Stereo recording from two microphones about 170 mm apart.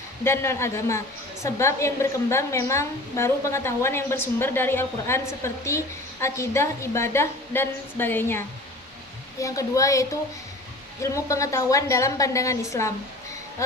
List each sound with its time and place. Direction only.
0.3 s a woman's voice: 15° left (ahead or behind)